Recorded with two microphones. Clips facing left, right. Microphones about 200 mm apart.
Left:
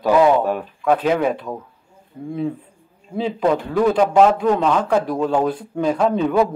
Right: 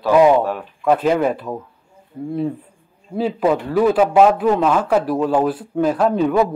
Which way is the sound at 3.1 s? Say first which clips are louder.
Right 1 dB; 5° right (ahead or behind).